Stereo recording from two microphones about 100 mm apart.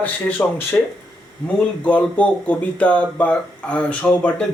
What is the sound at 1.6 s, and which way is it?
Speech, 15° left (ahead or behind).